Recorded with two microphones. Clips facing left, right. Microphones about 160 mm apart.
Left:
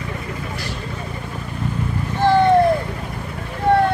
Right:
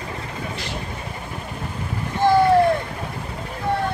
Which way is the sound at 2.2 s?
15° right (ahead or behind).